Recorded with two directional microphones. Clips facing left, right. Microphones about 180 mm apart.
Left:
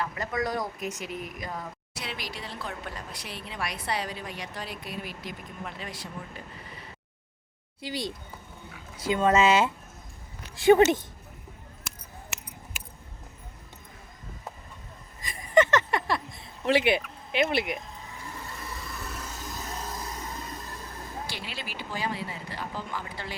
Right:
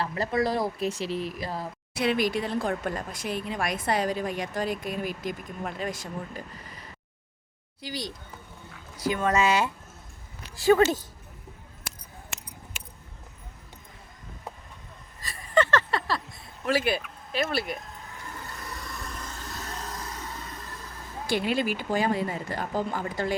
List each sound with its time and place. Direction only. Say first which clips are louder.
0.0 s speech: right 4 dB; 35° right (ahead or behind)
2.0 s speech: right 13 dB; 55° right (ahead or behind)
7.8 s speech: left 2 dB; 25° left (ahead or behind)
15.4 s a sound: left 2 dB; 20° left (ahead or behind)
17.3 s speech: left 2 dB; 20° left (ahead or behind)
17.7 s vehicle: left 1 dB; centre (ahead or behind)
21.2 s speech: right 13 dB; 50° right (ahead or behind)